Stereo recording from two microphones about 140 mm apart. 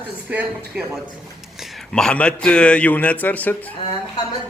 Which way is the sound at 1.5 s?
Centre (ahead or behind).